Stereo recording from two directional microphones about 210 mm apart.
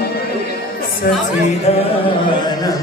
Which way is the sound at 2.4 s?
15° left (ahead or behind).